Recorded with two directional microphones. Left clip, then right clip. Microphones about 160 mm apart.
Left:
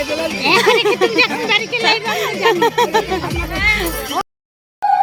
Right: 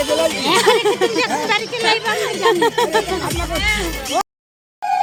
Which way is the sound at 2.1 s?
Centre (ahead or behind).